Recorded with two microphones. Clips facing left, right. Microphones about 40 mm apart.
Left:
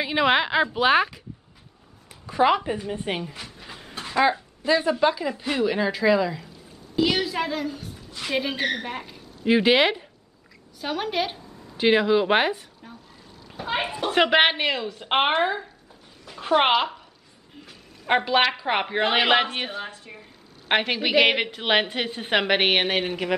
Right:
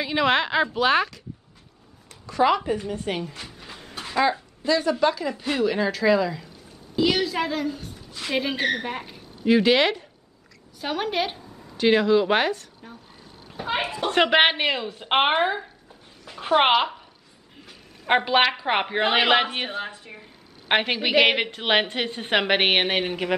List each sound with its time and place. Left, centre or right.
0.0 s a woman's voice: centre
3.2 s a woman's voice: centre
3.4 s a sound: centre
4.2 s a woman's voice: centre
9.5 s a woman's voice: centre
10.8 s speech: centre
11.7 s a woman's voice: centre
13.6 s speech: centre
18.0 s speech: centre